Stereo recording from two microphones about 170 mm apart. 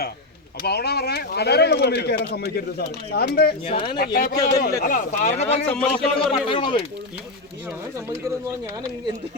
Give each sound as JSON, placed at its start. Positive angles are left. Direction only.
{"t": 0.6, "sound": "speech", "side_deg": 70}
{"t": 3.7, "sound": "speech", "side_deg": 25}
{"t": 3.9, "sound": "speech", "side_deg": 65}
{"t": 5.6, "sound": "speech", "side_deg": 5}
{"t": 6.3, "sound": "speech", "side_deg": 30}